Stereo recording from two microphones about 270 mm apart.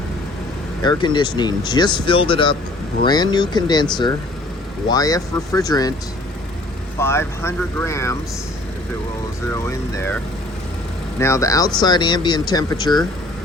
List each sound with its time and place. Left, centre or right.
0.8 s speech: centre
4.9 s speech: centre
7.0 s speech: centre
9.5 s speech: centre
11.2 s speech: centre